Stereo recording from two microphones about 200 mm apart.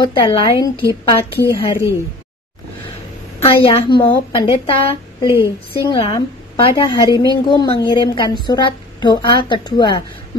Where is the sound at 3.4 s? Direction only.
25° left (ahead or behind).